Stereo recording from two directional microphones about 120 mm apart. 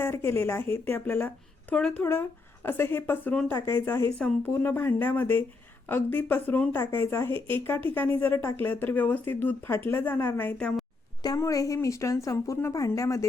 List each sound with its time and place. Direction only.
0.0 s a woman's voice: 20° left (ahead or behind)
11.2 s a woman's voice: 30° left (ahead or behind)